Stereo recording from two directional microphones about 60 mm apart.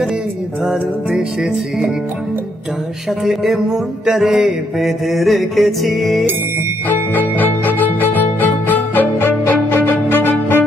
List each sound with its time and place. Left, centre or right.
0.7 s mantra: centre
3.3 s mantra: centre
6.9 s music: left